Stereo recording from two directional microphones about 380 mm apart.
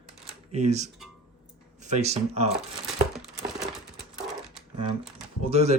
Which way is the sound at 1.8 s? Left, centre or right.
Centre.